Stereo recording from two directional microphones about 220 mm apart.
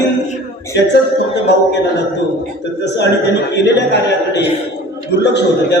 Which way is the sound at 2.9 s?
50° left (ahead or behind).